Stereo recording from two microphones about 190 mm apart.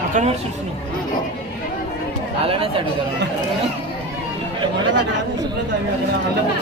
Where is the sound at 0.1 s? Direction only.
40° right (ahead or behind).